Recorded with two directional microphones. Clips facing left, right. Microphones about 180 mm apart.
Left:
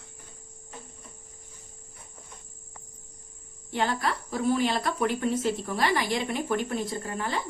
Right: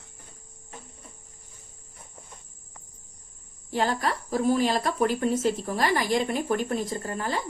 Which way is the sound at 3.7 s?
40° right (ahead or behind).